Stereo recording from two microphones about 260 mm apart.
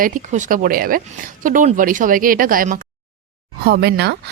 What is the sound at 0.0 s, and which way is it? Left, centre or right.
A woman's voice, right.